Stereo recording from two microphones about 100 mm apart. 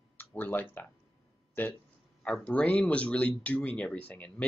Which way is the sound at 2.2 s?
10° left (ahead or behind).